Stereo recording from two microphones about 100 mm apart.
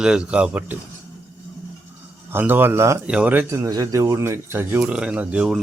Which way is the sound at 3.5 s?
35° right (ahead or behind).